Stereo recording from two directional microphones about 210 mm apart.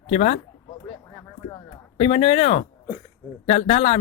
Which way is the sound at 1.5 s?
25° left (ahead or behind).